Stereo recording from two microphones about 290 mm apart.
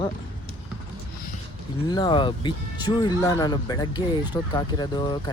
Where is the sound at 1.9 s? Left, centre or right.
Centre.